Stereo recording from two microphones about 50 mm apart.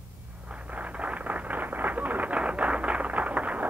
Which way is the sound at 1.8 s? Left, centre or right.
Right.